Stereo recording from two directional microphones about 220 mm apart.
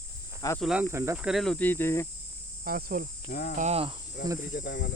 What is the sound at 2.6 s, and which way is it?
Cricket, 40° right (ahead or behind).